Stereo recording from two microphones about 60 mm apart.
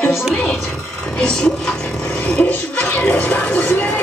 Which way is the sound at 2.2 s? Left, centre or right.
Centre.